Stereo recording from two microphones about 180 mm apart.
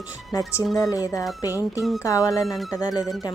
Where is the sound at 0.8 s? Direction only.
20° left (ahead or behind).